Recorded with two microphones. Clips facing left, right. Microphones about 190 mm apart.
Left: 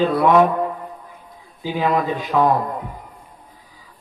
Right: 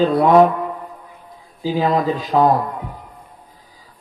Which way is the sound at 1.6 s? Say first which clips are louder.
Right 2 dB; 35° right (ahead or behind).